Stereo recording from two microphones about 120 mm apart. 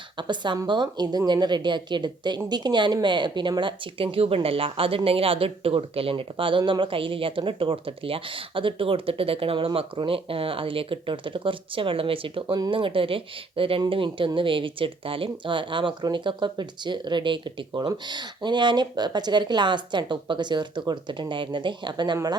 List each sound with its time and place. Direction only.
0.2 s speech: 40° right (ahead or behind)